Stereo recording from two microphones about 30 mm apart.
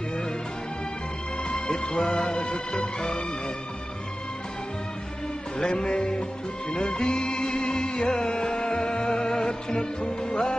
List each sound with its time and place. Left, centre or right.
1.5 s music: left
2.0 s music: left
5.6 s music: left